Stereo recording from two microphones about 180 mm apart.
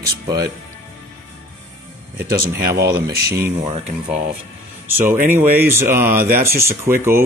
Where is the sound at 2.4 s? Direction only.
60° right (ahead or behind).